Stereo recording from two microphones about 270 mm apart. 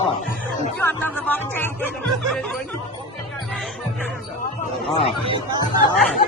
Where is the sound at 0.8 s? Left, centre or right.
Centre.